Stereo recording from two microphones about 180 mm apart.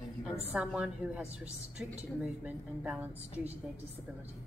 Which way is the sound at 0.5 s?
5° right (ahead or behind).